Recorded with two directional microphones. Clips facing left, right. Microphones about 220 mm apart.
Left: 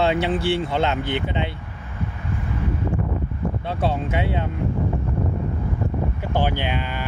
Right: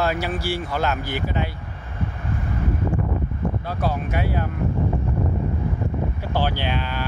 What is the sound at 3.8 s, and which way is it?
Speech, 25° left (ahead or behind).